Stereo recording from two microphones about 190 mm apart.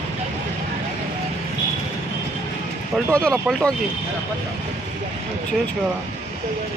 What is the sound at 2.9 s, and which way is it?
Speech, 5° left (ahead or behind).